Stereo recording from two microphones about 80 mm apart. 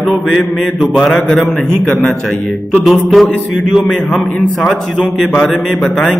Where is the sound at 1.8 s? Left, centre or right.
Centre.